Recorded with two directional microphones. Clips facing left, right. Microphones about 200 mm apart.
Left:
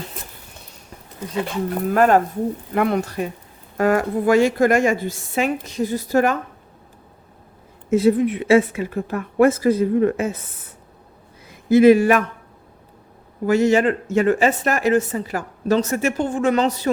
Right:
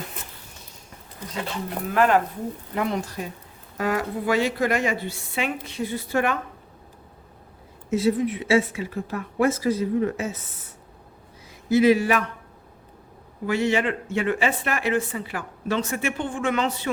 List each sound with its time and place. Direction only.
1.9 s a woman's voice: 45° left (ahead or behind)
2.7 s a woman's voice: 60° left (ahead or behind)
3.8 s a woman's voice: 50° left (ahead or behind)
7.9 s a woman's voice: 55° left (ahead or behind)
11.4 s speech: 50° left (ahead or behind)
13.4 s speech: 45° left (ahead or behind)